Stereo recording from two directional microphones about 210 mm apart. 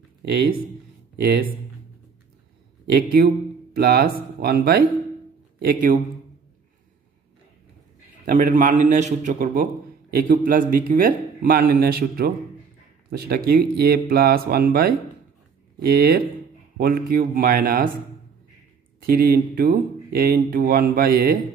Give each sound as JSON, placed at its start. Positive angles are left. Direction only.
{"t": 0.2, "sound": "speech", "side_deg": -50}
{"t": 2.9, "sound": "a man's voice", "side_deg": -45}
{"t": 8.3, "sound": "a man's voice", "side_deg": -40}
{"t": 19.0, "sound": "speech", "side_deg": -45}